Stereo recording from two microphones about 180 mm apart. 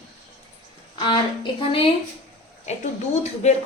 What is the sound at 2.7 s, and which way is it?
Speech, 40° left (ahead or behind).